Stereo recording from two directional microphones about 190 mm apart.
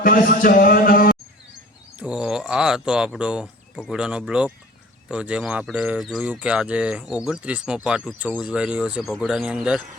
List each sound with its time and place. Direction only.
0.0 s a man's voice: 45° left (ahead or behind)
2.0 s speech: 5° right (ahead or behind)